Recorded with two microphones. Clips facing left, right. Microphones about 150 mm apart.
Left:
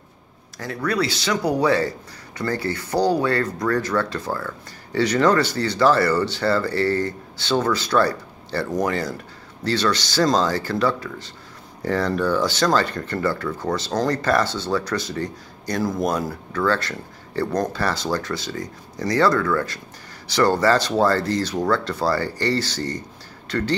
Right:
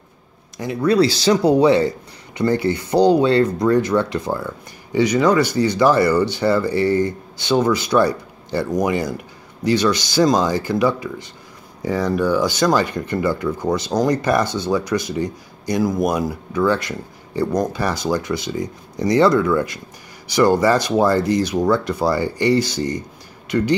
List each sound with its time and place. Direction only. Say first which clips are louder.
0.6 s speech: right 7 dB; 20° right (ahead or behind)